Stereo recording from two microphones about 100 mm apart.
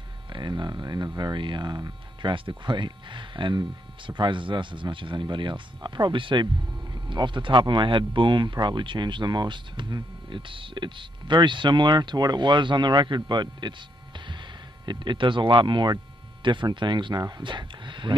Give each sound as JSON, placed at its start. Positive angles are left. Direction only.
{"t": 0.3, "sound": "speech", "side_deg": -50}